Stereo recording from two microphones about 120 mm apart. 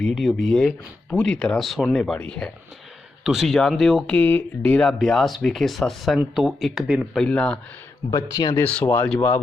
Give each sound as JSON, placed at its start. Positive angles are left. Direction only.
{"t": 0.0, "sound": "speech", "side_deg": 0}
{"t": 7.2, "sound": "speech", "side_deg": 10}
{"t": 8.1, "sound": "speech", "side_deg": 35}
{"t": 8.5, "sound": "speech", "side_deg": 20}